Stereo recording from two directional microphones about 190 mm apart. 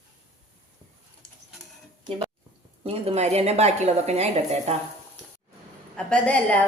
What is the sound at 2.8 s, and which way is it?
A woman's voice, 30° right (ahead or behind).